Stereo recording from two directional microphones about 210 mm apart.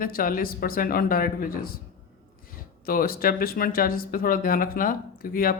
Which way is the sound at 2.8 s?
45° left (ahead or behind).